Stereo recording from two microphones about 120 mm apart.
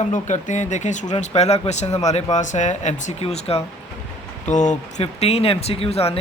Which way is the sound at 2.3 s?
85° left.